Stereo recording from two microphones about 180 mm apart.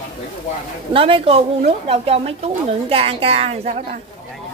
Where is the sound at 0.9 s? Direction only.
30° right (ahead or behind).